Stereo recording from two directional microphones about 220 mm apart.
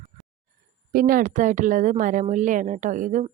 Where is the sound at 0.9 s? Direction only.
40° right (ahead or behind).